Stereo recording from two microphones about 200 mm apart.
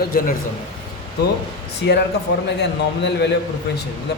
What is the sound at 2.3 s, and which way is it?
Speech, 55° left (ahead or behind).